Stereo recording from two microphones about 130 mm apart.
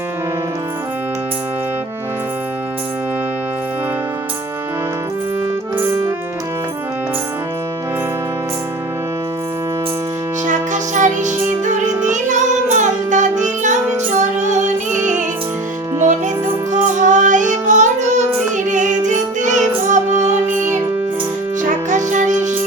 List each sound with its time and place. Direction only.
5.7 s music: 15° right (ahead or behind)
10.4 s music: 70° right (ahead or behind)